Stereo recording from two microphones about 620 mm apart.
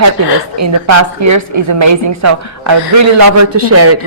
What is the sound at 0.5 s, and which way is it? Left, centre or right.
A woman's voice, right.